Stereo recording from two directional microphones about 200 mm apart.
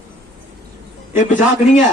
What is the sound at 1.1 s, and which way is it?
Speech, 40° left (ahead or behind).